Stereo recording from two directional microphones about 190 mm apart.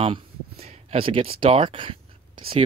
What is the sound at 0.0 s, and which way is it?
Speech, 30° right (ahead or behind).